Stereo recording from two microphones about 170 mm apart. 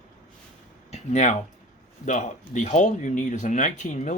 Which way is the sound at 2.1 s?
45° left (ahead or behind).